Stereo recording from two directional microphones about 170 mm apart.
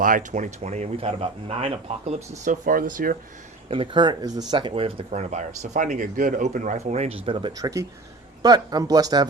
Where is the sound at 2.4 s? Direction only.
50° right (ahead or behind).